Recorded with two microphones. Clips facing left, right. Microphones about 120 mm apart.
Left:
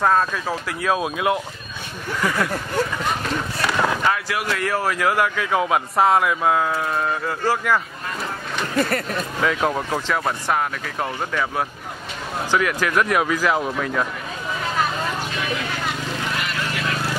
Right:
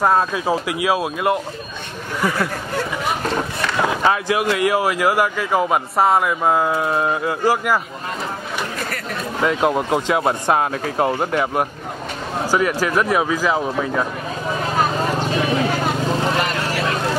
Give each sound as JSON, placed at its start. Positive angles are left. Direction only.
{"t": 0.0, "sound": "speech", "side_deg": -15}
{"t": 3.7, "sound": "speech", "side_deg": -15}
{"t": 9.4, "sound": "speech", "side_deg": -15}
{"t": 12.5, "sound": "speech", "side_deg": -35}
{"t": 12.9, "sound": "speech", "side_deg": -5}
{"t": 14.8, "sound": "vehicle", "side_deg": -35}